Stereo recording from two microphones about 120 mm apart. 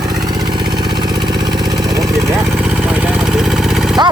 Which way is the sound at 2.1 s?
25° right (ahead or behind).